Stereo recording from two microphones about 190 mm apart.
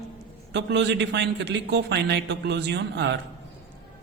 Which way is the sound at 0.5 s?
70° right (ahead or behind).